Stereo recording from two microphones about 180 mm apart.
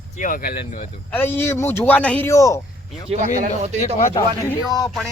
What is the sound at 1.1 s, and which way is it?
A man's voice, 10° left (ahead or behind).